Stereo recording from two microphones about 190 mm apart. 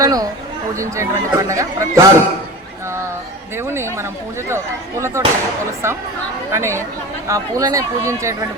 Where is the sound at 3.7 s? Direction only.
15° right (ahead or behind).